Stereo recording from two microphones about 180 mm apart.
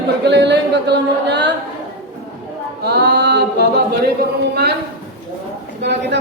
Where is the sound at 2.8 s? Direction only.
65° right (ahead or behind).